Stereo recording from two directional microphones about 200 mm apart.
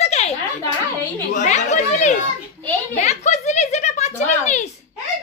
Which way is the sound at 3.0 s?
35° left (ahead or behind).